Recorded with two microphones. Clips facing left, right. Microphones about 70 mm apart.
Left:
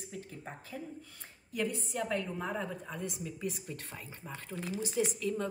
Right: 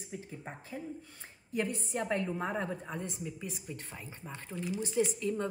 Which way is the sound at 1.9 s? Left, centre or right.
Centre.